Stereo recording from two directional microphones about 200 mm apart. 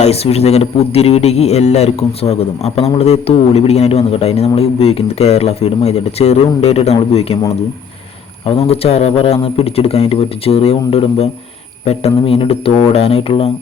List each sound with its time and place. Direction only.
0.0 s a man's voice: 30° left (ahead or behind)
8.4 s speech: 30° left (ahead or behind)